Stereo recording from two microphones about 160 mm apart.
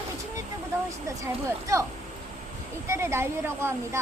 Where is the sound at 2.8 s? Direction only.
15° right (ahead or behind).